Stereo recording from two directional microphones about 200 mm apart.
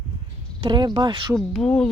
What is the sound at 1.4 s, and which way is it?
Speech, centre (ahead or behind).